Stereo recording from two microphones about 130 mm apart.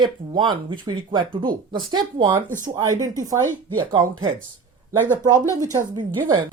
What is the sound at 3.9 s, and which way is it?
Speech, 40° right (ahead or behind).